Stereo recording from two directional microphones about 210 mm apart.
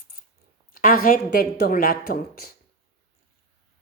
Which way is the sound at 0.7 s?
40° left (ahead or behind).